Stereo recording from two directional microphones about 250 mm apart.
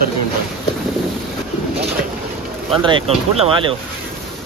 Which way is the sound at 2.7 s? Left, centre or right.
Right.